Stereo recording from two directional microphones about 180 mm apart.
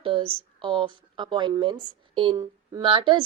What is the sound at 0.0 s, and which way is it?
A woman's voice, 30° right (ahead or behind).